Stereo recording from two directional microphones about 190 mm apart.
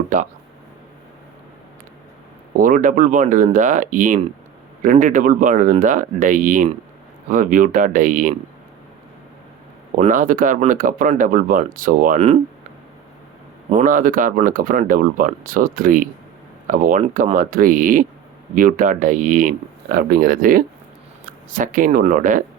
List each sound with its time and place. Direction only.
0.1 s speech: 40° right (ahead or behind)
2.6 s speech: 45° right (ahead or behind)
10.0 s speech: 45° right (ahead or behind)
13.7 s speech: 40° right (ahead or behind)